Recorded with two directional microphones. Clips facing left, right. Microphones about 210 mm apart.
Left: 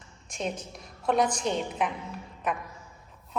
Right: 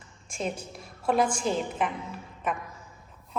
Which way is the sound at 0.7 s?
5° right (ahead or behind).